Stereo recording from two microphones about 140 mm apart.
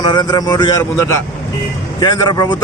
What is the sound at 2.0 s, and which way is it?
Speech, 30° left (ahead or behind).